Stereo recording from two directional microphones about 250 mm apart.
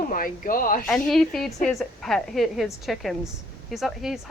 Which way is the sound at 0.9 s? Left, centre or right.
Centre.